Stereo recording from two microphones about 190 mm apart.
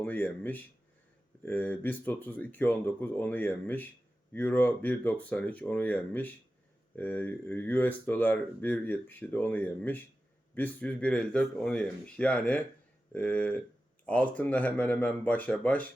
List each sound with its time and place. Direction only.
0.0 s speech: 10° left (ahead or behind)